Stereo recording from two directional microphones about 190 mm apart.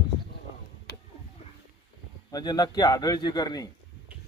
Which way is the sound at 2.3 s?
20° left (ahead or behind).